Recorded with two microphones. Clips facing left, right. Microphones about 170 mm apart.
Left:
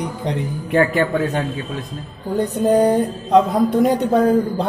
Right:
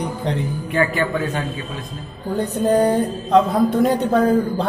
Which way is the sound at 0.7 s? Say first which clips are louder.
Left 4 dB; 50° left (ahead or behind).